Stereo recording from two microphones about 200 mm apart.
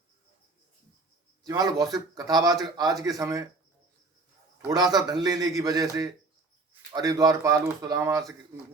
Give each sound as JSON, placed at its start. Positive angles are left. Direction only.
{"t": 1.5, "sound": "a man's voice", "side_deg": -20}
{"t": 4.5, "sound": "a man's voice", "side_deg": -20}